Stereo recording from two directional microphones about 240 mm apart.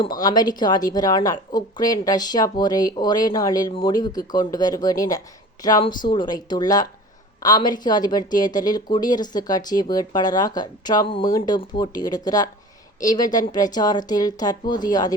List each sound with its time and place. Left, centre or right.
0.0 s speech: centre